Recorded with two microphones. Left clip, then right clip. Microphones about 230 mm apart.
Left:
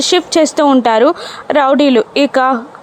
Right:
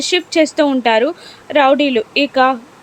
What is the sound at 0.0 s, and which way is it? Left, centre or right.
A woman's voice, centre.